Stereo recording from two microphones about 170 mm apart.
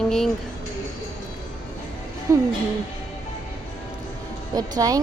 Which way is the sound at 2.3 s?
15° right (ahead or behind).